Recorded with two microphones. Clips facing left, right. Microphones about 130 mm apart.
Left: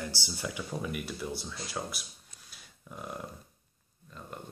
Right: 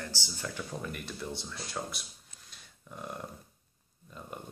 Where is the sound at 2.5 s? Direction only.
5° left (ahead or behind).